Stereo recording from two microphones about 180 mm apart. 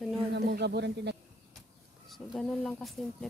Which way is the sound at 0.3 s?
70° right (ahead or behind).